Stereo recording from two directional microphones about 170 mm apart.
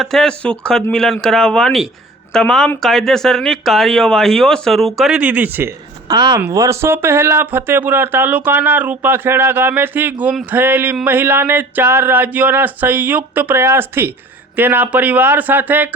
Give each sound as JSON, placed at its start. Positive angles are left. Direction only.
{"t": 0.0, "sound": "speech", "side_deg": 0}
{"t": 6.1, "sound": "speech", "side_deg": -25}